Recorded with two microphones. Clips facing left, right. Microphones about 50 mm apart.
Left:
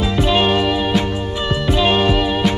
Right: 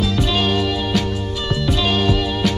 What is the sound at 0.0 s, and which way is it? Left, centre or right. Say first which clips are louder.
Music: left 3 dB; left.